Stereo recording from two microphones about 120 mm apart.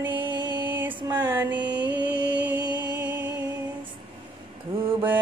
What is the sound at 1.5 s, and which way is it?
Mantra, 40° right (ahead or behind).